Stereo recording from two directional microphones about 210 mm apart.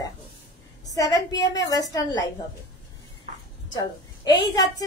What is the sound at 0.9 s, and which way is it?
A woman's voice, 15° left (ahead or behind).